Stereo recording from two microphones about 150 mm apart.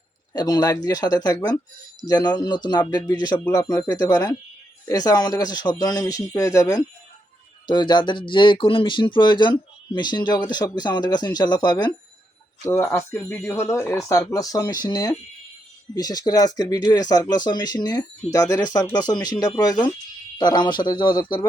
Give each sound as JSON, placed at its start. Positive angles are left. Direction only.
{"t": 0.3, "sound": "speech", "side_deg": 25}
{"t": 12.6, "sound": "speech", "side_deg": 15}